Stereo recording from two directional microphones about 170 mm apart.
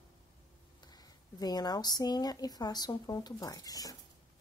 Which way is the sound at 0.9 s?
25° left (ahead or behind).